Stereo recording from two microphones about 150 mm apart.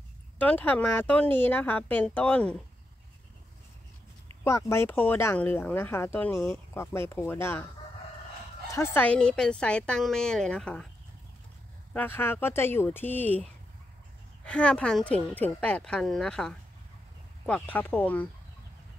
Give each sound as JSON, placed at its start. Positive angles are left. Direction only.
{"t": 0.4, "sound": "speech", "side_deg": 10}
{"t": 4.5, "sound": "speech", "side_deg": 20}
{"t": 8.7, "sound": "a woman's voice", "side_deg": 15}
{"t": 11.9, "sound": "speech", "side_deg": 10}
{"t": 14.4, "sound": "speech", "side_deg": 5}